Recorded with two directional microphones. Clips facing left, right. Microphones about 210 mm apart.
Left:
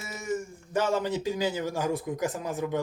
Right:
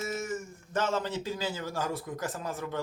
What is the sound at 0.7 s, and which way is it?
Speech, 15° left (ahead or behind).